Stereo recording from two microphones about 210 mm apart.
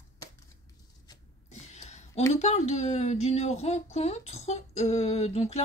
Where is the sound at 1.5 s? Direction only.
35° left (ahead or behind).